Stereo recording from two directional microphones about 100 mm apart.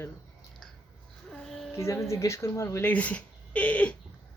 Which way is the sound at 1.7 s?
30° left (ahead or behind).